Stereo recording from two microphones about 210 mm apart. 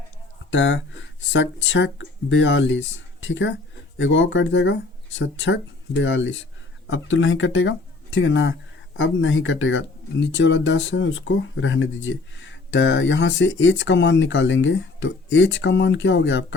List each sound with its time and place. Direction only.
0.5 s speech: 60° left (ahead or behind)